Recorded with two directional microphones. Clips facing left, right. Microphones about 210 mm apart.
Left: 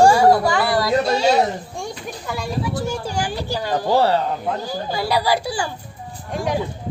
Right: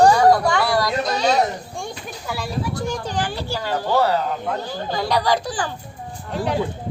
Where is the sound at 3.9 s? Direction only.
30° left (ahead or behind).